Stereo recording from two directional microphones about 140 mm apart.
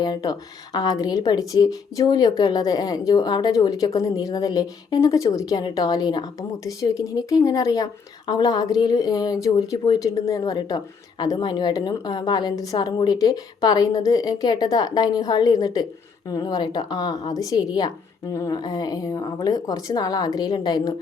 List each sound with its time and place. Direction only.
0.0 s speech: 30° left (ahead or behind)